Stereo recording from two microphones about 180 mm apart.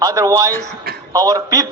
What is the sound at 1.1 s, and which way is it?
Speech, 20° right (ahead or behind).